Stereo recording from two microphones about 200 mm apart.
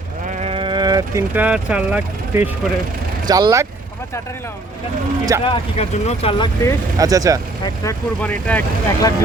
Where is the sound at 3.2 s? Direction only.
20° right (ahead or behind).